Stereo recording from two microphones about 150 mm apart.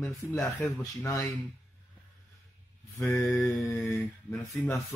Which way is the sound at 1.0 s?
20° left (ahead or behind).